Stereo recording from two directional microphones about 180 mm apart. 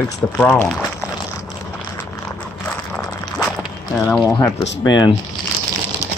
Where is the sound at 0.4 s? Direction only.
5° left (ahead or behind).